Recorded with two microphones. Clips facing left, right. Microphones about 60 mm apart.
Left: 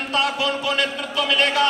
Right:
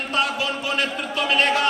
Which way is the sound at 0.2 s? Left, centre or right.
Left.